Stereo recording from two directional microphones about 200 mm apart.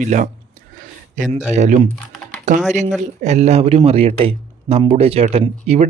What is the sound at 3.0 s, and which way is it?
Speech, 35° right (ahead or behind).